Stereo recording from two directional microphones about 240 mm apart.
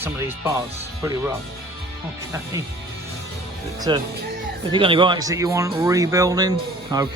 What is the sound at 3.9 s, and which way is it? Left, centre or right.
A man's voice, centre.